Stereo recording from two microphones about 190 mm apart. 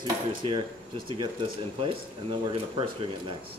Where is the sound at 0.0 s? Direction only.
25° right (ahead or behind).